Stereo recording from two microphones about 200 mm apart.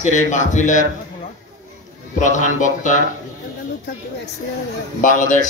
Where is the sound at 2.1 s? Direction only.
40° left (ahead or behind).